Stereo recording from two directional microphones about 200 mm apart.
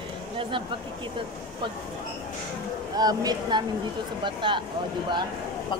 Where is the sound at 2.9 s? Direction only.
20° right (ahead or behind).